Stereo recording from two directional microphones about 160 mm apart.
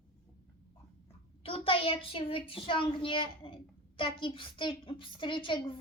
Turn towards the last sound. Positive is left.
turn(degrees=30)  # may be behind; listen again after turning